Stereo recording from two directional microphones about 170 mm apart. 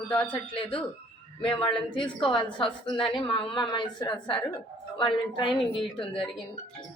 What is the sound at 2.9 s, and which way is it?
A woman's voice, 30° left (ahead or behind).